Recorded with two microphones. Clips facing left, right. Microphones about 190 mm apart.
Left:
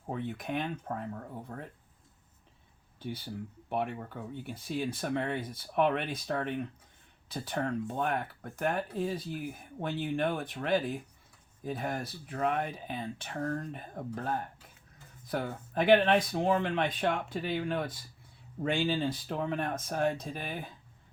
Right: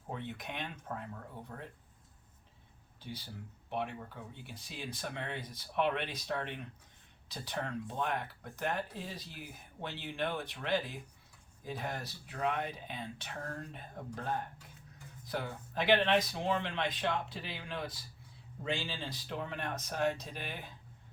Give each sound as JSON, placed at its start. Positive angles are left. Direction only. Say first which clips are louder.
{"t": 0.1, "sound": "speech", "louder": "left 7 dB", "side_deg": 45}
{"t": 3.7, "sound": "speech", "louder": "left 4 dB", "side_deg": 50}